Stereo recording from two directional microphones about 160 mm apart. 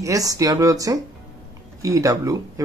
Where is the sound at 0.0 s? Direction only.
20° right (ahead or behind).